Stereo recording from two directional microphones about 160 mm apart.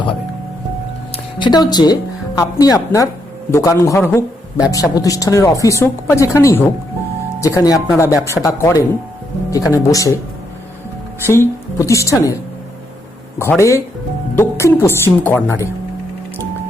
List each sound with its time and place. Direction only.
1.1 s speech: 30° left (ahead or behind)
11.3 s speech: 15° left (ahead or behind)
13.4 s a woman's voice: 15° left (ahead or behind)